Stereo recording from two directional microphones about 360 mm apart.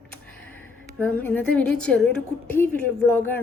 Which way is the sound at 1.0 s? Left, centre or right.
Centre.